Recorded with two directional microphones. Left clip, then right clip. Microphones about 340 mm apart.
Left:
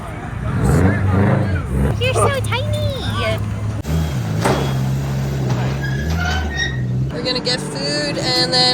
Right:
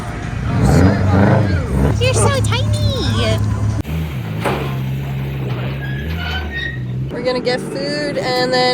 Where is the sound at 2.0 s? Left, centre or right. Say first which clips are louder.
Even; centre.